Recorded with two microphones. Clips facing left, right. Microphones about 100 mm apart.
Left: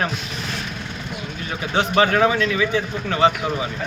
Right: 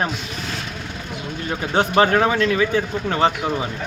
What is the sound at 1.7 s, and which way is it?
Speech, 40° right (ahead or behind).